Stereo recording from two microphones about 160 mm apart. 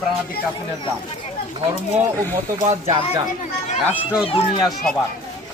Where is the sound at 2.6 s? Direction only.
45° right (ahead or behind).